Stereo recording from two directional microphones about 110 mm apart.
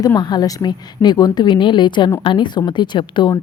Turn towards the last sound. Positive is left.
turn(degrees=45)  # may be behind; listen again after turning